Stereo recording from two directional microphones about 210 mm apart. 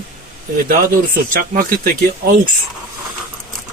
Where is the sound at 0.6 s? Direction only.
40° right (ahead or behind).